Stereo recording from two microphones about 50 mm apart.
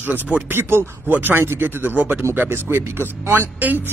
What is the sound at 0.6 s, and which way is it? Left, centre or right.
Speech, right.